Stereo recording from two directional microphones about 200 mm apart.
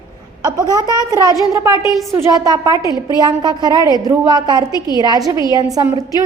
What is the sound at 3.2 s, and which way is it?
A woman's voice, 20° right (ahead or behind).